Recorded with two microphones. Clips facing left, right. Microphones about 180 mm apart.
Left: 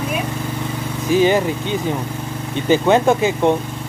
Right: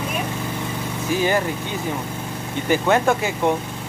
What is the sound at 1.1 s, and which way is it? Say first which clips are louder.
Speech: left 6 dB; 20° left (ahead or behind).